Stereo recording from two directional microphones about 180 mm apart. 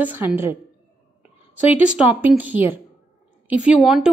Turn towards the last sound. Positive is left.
turn(degrees=0)  # may be behind; listen again after turning